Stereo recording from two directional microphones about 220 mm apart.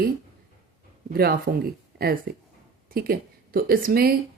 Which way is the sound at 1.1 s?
45° right (ahead or behind).